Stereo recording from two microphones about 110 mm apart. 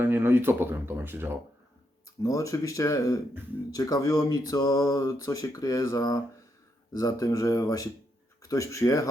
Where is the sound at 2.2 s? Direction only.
30° left (ahead or behind).